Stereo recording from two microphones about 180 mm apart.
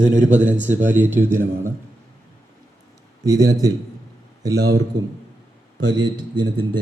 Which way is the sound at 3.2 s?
20° right (ahead or behind).